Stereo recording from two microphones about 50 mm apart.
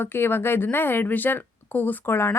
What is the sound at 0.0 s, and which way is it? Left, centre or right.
A woman's voice, left.